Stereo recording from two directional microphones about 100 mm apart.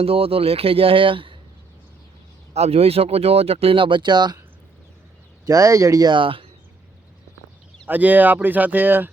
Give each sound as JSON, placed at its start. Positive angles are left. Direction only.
{"t": 0.0, "sound": "speech", "side_deg": -75}
{"t": 2.5, "sound": "speech", "side_deg": -90}
{"t": 5.5, "sound": "speech", "side_deg": -35}
{"t": 6.1, "sound": "speech", "side_deg": -60}
{"t": 7.9, "sound": "speech", "side_deg": -15}